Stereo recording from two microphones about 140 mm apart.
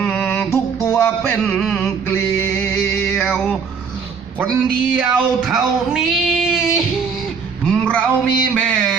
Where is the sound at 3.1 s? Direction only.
Centre (ahead or behind).